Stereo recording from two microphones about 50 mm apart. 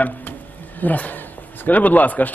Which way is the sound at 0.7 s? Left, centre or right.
Left.